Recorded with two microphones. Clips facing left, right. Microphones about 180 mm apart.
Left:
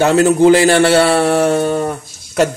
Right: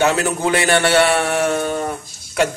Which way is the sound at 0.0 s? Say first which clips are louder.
Left 8 dB; 30° left (ahead or behind).